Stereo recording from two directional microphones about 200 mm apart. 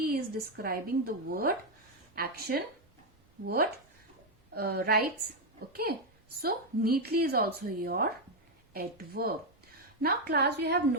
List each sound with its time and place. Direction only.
0.0 s a woman's voice: 50° right (ahead or behind)